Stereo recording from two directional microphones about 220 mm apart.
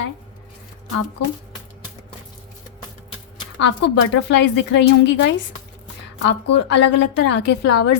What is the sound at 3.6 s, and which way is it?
A woman's voice, 55° left (ahead or behind).